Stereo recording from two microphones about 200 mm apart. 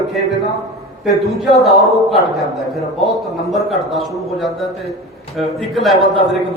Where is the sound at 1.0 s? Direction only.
Centre (ahead or behind).